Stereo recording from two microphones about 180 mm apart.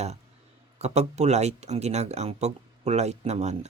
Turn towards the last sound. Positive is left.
turn(degrees=-40)  # may be behind; listen again after turning